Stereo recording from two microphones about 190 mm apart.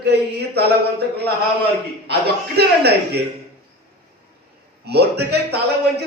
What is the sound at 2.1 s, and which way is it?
A man's voice, 55° right (ahead or behind).